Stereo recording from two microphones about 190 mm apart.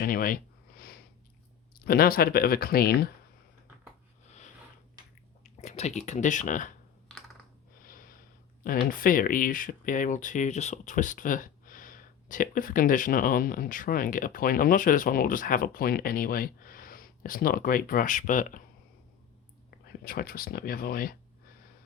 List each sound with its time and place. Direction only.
0.0 s a sound: 50° left (ahead or behind)
1.8 s speech: 55° left (ahead or behind)
5.4 s speech: 35° left (ahead or behind)
7.8 s snort: 50° left (ahead or behind)
8.9 s speech: 45° left (ahead or behind)
20.1 s speech: 50° left (ahead or behind)